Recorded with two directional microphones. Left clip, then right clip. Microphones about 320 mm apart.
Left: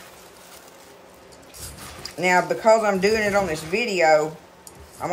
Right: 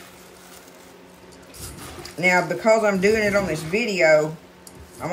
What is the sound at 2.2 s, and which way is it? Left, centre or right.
Speech, centre.